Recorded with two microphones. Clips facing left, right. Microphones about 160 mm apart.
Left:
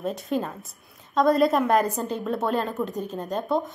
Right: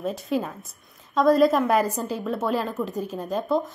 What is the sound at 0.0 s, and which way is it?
A woman's voice, centre (ahead or behind).